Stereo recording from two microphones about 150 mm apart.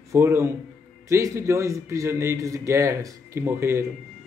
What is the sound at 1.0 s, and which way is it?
A man's voice, 20° right (ahead or behind).